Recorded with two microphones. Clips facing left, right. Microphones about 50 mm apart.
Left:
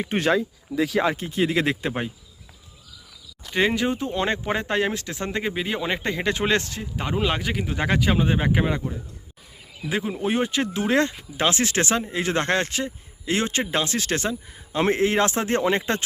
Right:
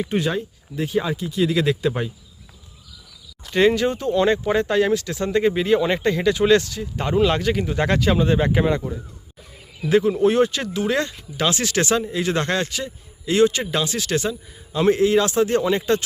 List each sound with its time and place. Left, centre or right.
0.1 s speech: left
0.9 s speech: left
1.1 s speech: left
3.5 s speech: centre
5.4 s speech: centre
6.2 s speech: left
6.9 s speech: centre
9.9 s speech: centre
10.3 s speech: centre
10.8 s speech: left